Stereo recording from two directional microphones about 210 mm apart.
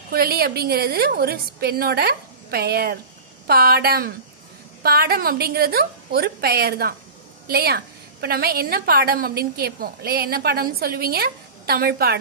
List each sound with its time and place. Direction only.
0.1 s a woman's voice: 50° right (ahead or behind)